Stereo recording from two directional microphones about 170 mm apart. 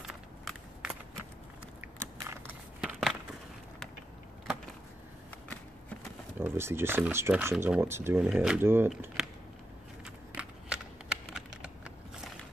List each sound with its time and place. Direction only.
0.0 s walk: 5° right (ahead or behind)
1.8 s biting: 15° right (ahead or behind)
2.8 s a sound: 5° right (ahead or behind)
6.4 s speech: 15° right (ahead or behind)
8.3 s speech: 5° right (ahead or behind)
9.2 s a sound: centre (ahead or behind)
11.3 s typing: 5° right (ahead or behind)